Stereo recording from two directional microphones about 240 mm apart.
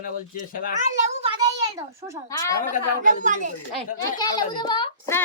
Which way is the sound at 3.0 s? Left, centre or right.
Right.